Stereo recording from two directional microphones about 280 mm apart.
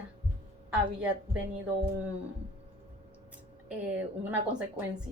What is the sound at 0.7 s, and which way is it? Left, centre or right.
Speech, centre.